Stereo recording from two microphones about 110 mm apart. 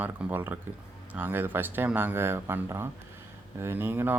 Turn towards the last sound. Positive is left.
turn(degrees=-20)  # may be behind; listen again after turning